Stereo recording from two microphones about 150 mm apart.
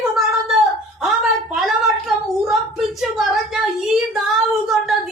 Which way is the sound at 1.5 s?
Centre (ahead or behind).